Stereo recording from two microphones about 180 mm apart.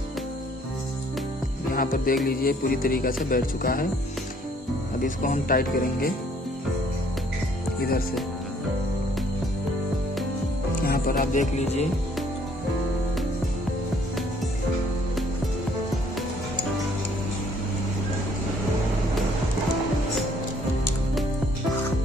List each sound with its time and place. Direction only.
1.7 s music: 50° left (ahead or behind)
2.2 s speech: 55° left (ahead or behind)
5.0 s speech: 50° left (ahead or behind)
10.8 s music: 55° left (ahead or behind); by 11.9 s 40° left (ahead or behind)